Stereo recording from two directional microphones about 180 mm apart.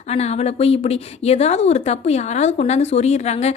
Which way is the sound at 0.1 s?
35° left (ahead or behind).